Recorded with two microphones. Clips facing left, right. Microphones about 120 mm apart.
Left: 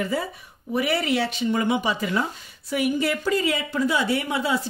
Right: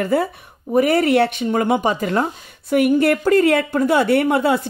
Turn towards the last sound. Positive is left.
turn(degrees=-55)  # may be behind; listen again after turning